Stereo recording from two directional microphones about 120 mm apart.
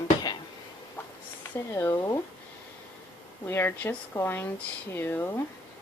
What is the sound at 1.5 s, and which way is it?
Speech, 25° left (ahead or behind).